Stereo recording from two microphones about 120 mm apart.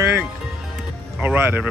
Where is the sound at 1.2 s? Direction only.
15° right (ahead or behind).